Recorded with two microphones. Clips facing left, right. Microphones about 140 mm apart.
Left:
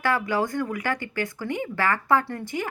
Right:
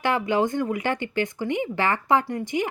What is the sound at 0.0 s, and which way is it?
Speech, 20° right (ahead or behind).